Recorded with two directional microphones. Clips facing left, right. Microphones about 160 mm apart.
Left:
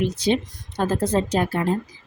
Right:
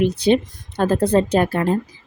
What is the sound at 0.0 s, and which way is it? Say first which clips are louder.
Speech: right 5 dB; 60° right (ahead or behind).